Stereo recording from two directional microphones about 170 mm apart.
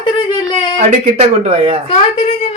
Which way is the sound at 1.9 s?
35° left (ahead or behind).